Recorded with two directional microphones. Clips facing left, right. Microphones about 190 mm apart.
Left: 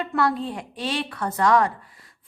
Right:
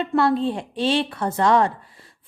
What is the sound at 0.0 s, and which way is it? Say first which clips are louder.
A woman's voice: right 4 dB; 25° right (ahead or behind).